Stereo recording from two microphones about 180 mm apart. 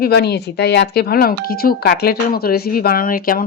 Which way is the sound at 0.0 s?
65° left (ahead or behind).